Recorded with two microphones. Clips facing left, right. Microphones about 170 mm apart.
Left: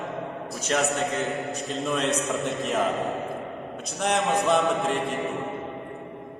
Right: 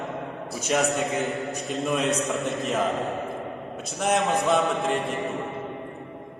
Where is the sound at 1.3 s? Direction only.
Centre (ahead or behind).